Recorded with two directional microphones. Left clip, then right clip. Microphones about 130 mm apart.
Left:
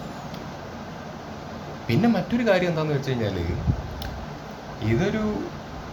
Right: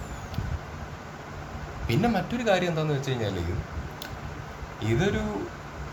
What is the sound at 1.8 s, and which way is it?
Speech, 15° right (ahead or behind).